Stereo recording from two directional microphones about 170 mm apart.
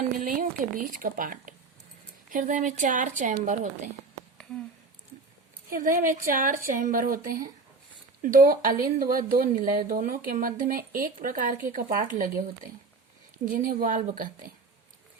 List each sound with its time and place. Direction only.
0.2 s speech: 55° right (ahead or behind)
5.7 s speech: 55° right (ahead or behind)
13.4 s speech: 50° right (ahead or behind)